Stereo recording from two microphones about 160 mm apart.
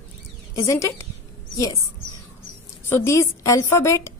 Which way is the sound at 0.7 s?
20° left (ahead or behind).